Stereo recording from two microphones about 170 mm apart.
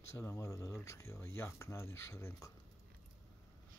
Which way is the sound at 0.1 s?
15° left (ahead or behind).